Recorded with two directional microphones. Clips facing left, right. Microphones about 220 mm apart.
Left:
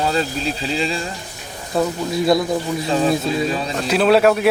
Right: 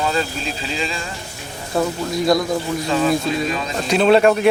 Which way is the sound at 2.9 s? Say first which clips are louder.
Even; 35° left (ahead or behind).